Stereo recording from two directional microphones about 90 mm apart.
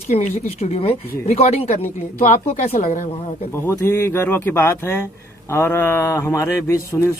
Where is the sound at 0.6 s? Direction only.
90° left.